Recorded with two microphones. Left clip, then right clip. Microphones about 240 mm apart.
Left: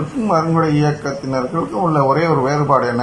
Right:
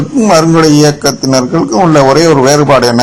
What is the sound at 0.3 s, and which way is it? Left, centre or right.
A man's voice, right.